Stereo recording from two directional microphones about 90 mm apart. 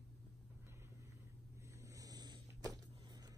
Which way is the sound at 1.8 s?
40° right (ahead or behind).